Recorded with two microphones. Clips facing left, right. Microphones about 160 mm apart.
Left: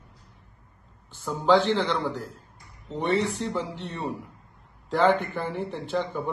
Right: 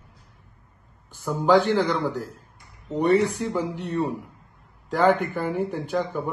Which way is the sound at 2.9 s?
15° right (ahead or behind).